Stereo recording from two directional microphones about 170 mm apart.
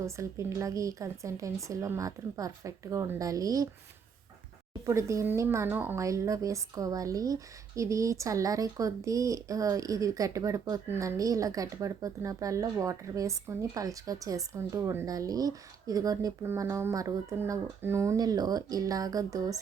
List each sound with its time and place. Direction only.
0.0 s speech: 15° right (ahead or behind)
4.9 s speech: 15° right (ahead or behind)